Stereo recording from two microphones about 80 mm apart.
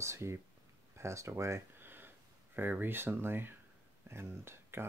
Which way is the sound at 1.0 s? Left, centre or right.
Right.